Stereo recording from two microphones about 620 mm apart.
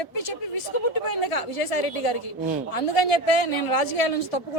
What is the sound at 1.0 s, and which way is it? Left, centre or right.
Speech, left.